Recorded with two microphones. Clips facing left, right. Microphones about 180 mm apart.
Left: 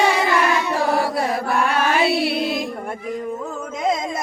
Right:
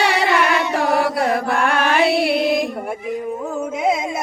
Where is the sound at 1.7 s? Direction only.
55° right (ahead or behind).